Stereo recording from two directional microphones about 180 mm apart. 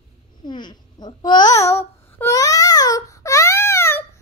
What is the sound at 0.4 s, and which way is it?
A child's voice, 25° left (ahead or behind).